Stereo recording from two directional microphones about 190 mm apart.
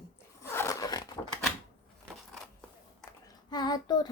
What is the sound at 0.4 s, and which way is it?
Zipper, 15° left (ahead or behind).